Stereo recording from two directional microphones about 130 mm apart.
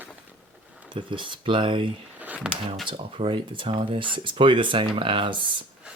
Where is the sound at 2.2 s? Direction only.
10° right (ahead or behind).